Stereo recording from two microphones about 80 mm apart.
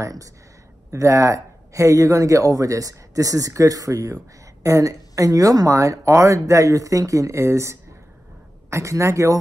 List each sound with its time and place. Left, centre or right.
0.0 s a man's voice: right